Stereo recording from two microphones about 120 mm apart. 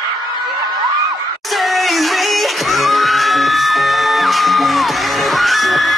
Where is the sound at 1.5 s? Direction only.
Centre (ahead or behind).